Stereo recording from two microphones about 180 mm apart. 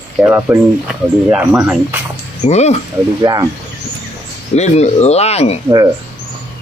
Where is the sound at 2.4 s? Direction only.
40° left (ahead or behind).